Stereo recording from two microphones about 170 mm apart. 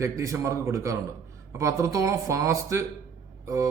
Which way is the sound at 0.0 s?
15° right (ahead or behind).